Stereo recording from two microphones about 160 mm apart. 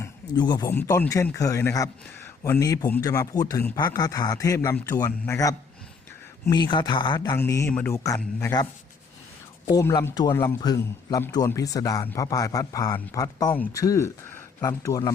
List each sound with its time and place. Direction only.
0.3 s a man's voice: 25° left (ahead or behind)
0.7 s a man's voice: 15° left (ahead or behind)
7.3 s speech: 15° left (ahead or behind)
9.7 s a man's voice: 20° left (ahead or behind)